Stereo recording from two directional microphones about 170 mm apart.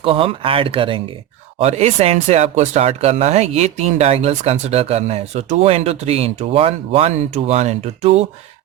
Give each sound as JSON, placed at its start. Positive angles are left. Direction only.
{"t": 0.0, "sound": "speech", "side_deg": -30}